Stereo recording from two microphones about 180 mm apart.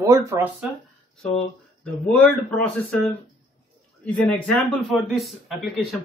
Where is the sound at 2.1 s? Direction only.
5° left (ahead or behind).